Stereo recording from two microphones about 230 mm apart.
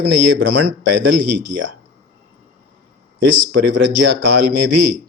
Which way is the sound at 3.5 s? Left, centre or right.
Right.